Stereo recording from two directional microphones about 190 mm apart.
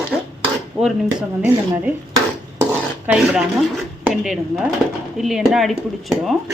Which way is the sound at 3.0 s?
5° right (ahead or behind).